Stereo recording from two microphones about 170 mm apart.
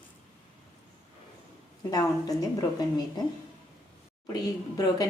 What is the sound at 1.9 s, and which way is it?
A woman's voice, 20° left (ahead or behind).